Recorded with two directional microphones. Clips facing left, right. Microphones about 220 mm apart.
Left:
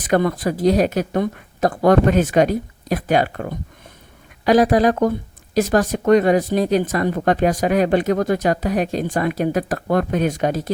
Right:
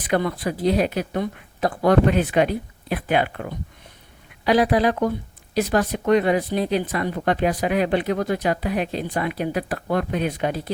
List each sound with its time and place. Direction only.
0.0 s speech: 45° left (ahead or behind)